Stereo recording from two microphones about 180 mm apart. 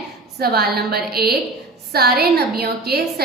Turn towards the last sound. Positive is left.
turn(degrees=-60)  # may be behind; listen again after turning